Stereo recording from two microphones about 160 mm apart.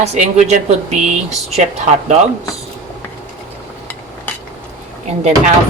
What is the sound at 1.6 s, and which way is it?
Speech, 50° right (ahead or behind).